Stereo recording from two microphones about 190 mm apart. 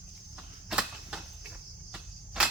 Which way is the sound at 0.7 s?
5° right (ahead or behind).